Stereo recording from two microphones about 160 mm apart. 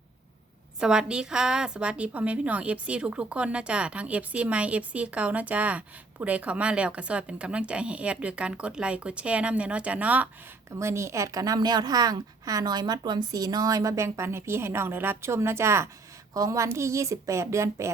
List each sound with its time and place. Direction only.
0.8 s a woman's voice: 5° right (ahead or behind)